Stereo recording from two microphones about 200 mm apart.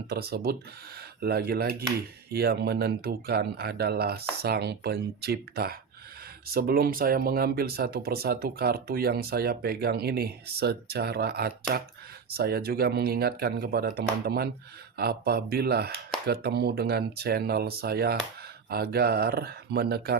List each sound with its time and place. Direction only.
0.1 s speech: 50° right (ahead or behind)